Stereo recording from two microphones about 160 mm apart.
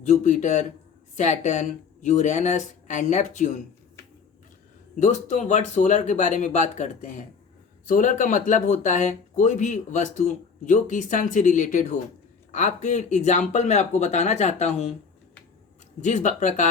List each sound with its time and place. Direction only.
0.0 s speech: 50° left (ahead or behind)
4.9 s speech: 50° left (ahead or behind)
16.0 s speech: 50° left (ahead or behind)